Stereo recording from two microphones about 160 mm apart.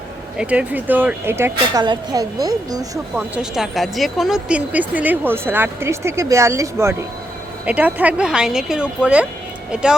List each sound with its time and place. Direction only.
0.3 s speech: 10° right (ahead or behind)
1.8 s speech: 25° right (ahead or behind)
3.3 s speech: 5° right (ahead or behind)